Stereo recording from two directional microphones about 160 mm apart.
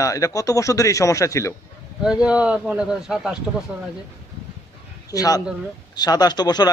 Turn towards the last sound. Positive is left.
turn(degrees=25)  # may be behind; listen again after turning